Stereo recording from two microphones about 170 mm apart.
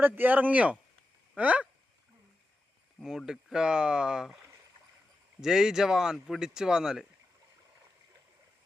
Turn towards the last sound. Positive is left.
turn(degrees=-5)  # may be behind; listen again after turning